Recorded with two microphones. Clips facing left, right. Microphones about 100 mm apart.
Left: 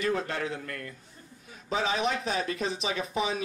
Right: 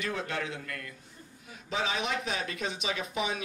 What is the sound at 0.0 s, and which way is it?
A man's voice, 35° left (ahead or behind).